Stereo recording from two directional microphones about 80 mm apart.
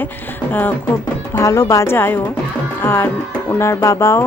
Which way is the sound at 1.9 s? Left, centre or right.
Left.